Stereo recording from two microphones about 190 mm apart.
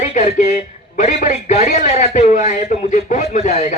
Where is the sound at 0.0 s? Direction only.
40° left (ahead or behind).